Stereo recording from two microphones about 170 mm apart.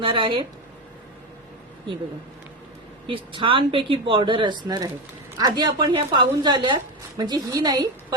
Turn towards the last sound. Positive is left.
turn(degrees=-20)  # may be behind; listen again after turning